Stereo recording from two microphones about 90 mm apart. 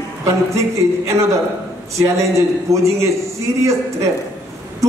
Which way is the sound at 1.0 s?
35° right (ahead or behind).